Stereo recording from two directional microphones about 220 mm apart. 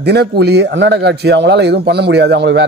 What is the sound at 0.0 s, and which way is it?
A man's voice, 50° right (ahead or behind).